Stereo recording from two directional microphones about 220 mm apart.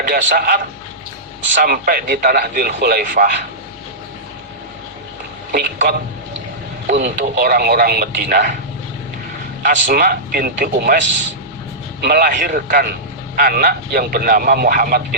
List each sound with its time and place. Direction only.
0.1 s a man's voice: 40° right (ahead or behind)
1.6 s speech: 40° right (ahead or behind)
5.5 s a sound: 45° right (ahead or behind)
7.0 s speech: 40° right (ahead or behind)
9.6 s a man's voice: 40° right (ahead or behind)
11.9 s a man's voice: 45° right (ahead or behind)